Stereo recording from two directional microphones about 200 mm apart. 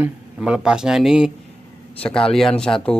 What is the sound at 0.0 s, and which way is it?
Speech, 5° right (ahead or behind).